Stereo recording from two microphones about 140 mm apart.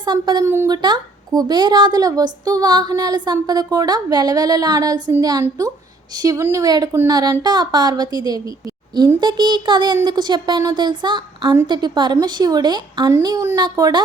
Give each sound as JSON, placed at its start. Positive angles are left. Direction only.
{"t": 0.0, "sound": "speech", "side_deg": -30}
{"t": 0.4, "sound": "speech", "side_deg": -20}
{"t": 0.7, "sound": "speech", "side_deg": -30}